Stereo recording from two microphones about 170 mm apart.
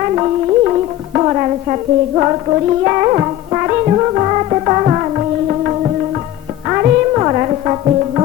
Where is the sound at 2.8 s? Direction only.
30° right (ahead or behind).